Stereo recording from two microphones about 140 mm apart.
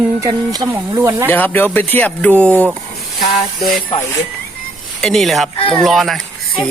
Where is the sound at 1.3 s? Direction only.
15° left (ahead or behind).